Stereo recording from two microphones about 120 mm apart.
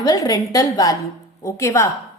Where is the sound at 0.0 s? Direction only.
30° left (ahead or behind).